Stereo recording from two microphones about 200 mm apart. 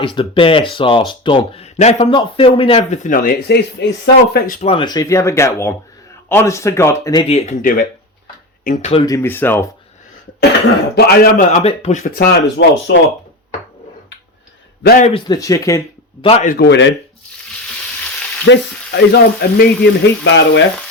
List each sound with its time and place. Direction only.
0.0 s speech: 25° left (ahead or behind); by 4.6 s 50° left (ahead or behind)
4.6 s speech: 25° left (ahead or behind)
9.0 s speech: 15° left (ahead or behind)
10.7 s a man's voice: 50° left (ahead or behind)
11.6 s speech: 35° left (ahead or behind)
12.1 s frying: 50° left (ahead or behind); by 13.0 s 65° left (ahead or behind)
14.8 s speech: 40° left (ahead or behind)
15.1 s speech: 20° left (ahead or behind)
16.2 s speech: 30° left (ahead or behind)
16.5 s frying: 55° left (ahead or behind)
18.4 s frying: 60° left (ahead or behind)